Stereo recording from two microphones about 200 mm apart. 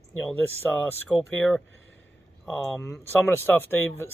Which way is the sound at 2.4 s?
10° left (ahead or behind).